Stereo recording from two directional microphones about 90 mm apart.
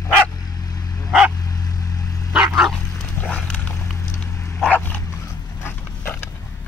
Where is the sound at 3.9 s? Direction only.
40° left (ahead or behind).